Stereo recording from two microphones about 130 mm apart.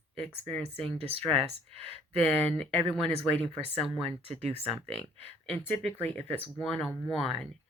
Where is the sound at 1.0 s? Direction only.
50° right (ahead or behind).